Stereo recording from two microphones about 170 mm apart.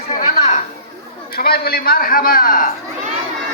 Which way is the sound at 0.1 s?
45° left (ahead or behind).